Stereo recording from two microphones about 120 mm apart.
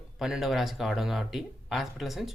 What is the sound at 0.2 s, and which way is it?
Speech, 5° right (ahead or behind).